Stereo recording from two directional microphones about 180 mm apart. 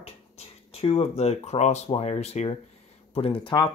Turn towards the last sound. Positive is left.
turn(degrees=25)  # may be behind; listen again after turning